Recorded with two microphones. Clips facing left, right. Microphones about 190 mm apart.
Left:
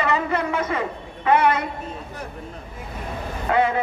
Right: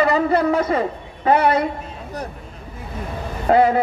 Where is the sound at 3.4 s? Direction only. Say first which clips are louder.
Right 6 dB; 35° right (ahead or behind).